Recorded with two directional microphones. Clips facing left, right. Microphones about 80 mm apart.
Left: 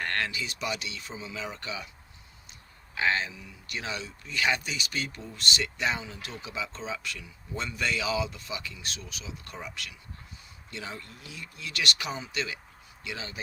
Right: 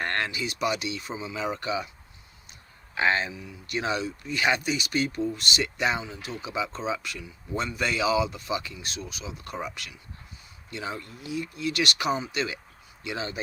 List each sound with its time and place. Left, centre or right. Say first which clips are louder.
0.0 s a sound: right 2 dB; right
0.3 s speech: right 5 dB; centre
2.9 s speech: right 3 dB; right
10.7 s speech: right 5 dB; centre